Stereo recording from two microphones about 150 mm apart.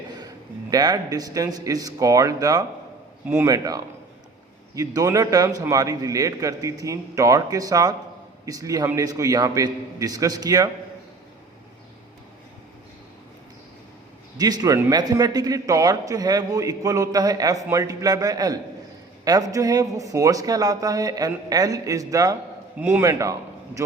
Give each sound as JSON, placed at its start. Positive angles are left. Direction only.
{"t": 0.7, "sound": "a man's voice", "side_deg": -25}
{"t": 14.3, "sound": "a man's voice", "side_deg": -25}
{"t": 22.8, "sound": "a man's voice", "side_deg": -10}
{"t": 23.0, "sound": "a man's voice", "side_deg": -20}